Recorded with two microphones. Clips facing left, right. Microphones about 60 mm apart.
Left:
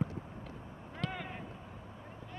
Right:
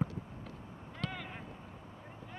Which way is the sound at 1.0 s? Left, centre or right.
Centre.